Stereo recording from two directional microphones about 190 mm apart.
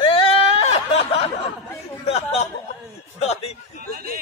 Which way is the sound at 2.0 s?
35° left (ahead or behind).